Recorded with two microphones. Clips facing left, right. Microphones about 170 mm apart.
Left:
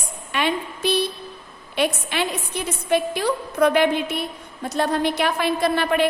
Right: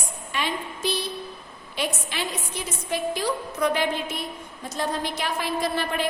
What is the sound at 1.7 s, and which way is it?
A woman's voice, 65° left (ahead or behind).